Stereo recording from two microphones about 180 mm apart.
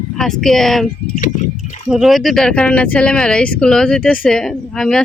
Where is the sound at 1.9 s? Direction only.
Centre (ahead or behind).